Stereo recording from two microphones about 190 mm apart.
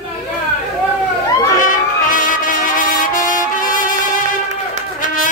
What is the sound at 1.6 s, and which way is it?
Music, 45° left (ahead or behind).